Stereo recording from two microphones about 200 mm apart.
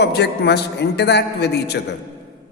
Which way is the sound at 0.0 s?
55° left (ahead or behind).